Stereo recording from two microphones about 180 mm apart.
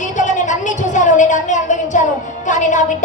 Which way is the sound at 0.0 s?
45° left (ahead or behind).